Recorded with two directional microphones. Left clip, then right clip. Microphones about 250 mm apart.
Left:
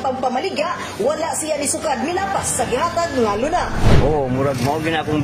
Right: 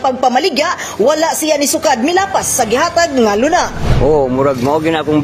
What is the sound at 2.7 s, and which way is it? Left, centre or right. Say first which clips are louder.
A woman's voice: right 7 dB; right.